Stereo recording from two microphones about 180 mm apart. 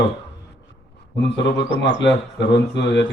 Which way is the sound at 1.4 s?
70° left (ahead or behind).